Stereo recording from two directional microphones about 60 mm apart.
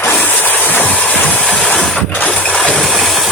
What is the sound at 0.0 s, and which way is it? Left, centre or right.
Train, left.